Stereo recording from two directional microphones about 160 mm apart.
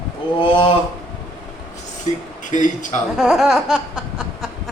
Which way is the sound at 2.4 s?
50° left (ahead or behind).